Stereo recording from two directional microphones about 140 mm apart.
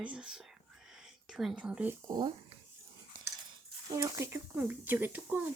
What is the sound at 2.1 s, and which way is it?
Speech, 30° right (ahead or behind).